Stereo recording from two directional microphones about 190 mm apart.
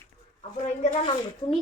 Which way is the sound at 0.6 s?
40° left (ahead or behind).